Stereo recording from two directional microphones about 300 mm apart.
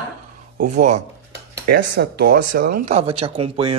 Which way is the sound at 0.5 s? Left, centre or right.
Right.